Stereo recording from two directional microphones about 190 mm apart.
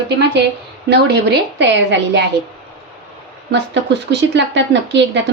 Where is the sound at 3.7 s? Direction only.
65° right (ahead or behind).